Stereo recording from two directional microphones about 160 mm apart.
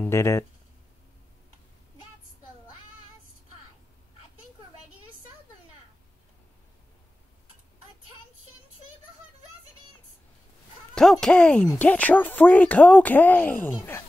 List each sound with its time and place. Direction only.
0.0 s speech: 15° left (ahead or behind)
11.0 s speech: 5° left (ahead or behind)